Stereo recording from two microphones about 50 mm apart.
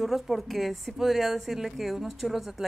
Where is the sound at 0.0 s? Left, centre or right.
Centre.